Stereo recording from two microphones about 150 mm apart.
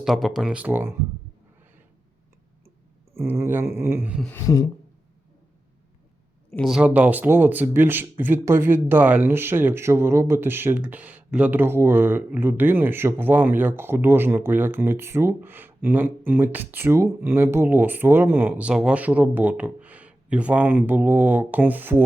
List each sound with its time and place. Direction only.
0.0 s speech: centre (ahead or behind)
3.2 s speech: 15° right (ahead or behind)
4.3 s speech: 20° left (ahead or behind)
6.6 s speech: 5° right (ahead or behind)